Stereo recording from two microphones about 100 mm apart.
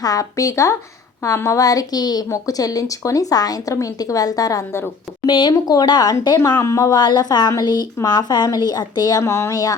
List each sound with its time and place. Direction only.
0.0 s a woman's voice: 35° left (ahead or behind)
5.2 s a woman's voice: 50° left (ahead or behind)
9.2 s a woman's voice: 30° left (ahead or behind)